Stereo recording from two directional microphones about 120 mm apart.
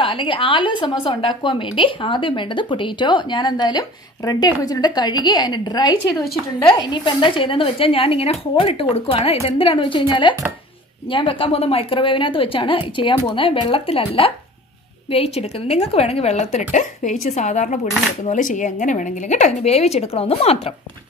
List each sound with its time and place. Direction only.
0.0 s a woman's voice: 45° left (ahead or behind); by 17.7 s 75° left (ahead or behind)
18.2 s a woman's voice: 90° left; by 20.7 s 55° left (ahead or behind)